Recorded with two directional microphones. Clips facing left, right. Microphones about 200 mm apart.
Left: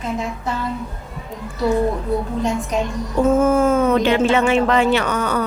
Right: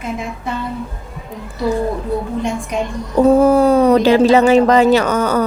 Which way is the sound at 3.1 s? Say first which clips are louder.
Right 5 dB; 35° right (ahead or behind).